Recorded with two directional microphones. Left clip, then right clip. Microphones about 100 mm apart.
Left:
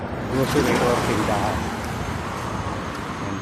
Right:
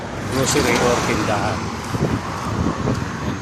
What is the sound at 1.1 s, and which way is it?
Speech, 25° right (ahead or behind).